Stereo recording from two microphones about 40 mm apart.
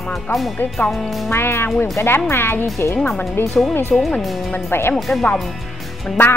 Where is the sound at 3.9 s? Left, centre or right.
Centre.